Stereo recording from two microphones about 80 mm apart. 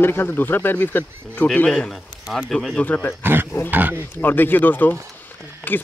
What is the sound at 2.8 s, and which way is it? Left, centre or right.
Speech, left.